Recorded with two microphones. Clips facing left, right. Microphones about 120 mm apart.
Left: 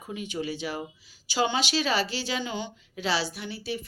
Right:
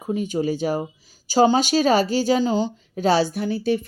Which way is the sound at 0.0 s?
40° right (ahead or behind).